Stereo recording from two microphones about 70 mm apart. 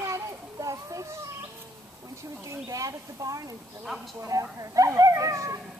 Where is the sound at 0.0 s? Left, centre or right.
Right.